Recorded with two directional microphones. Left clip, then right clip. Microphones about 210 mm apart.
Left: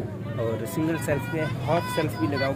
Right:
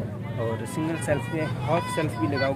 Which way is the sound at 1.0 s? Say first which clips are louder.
Even; 10° left (ahead or behind).